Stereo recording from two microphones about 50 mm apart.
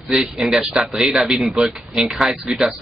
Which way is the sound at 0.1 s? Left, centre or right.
Centre.